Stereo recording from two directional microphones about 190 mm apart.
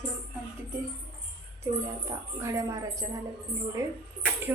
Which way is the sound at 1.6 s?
20° right (ahead or behind).